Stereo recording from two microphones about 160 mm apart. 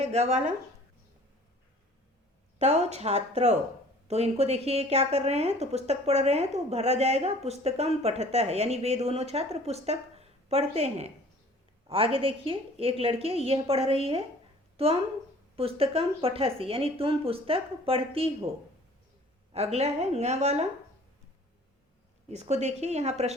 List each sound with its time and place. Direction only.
0.0 s speech: 40° right (ahead or behind)
2.6 s speech: 45° right (ahead or behind)
19.5 s speech: 40° right (ahead or behind)
22.3 s speech: 45° right (ahead or behind)